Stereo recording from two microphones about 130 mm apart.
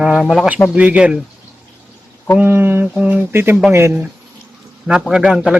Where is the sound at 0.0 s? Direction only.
5° right (ahead or behind).